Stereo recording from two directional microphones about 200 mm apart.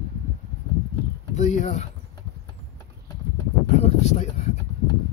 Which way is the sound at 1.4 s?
35° left (ahead or behind).